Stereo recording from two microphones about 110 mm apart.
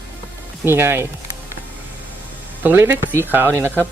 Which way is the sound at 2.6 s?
20° right (ahead or behind).